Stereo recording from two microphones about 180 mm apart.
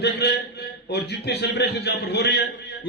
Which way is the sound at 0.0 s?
65° left (ahead or behind).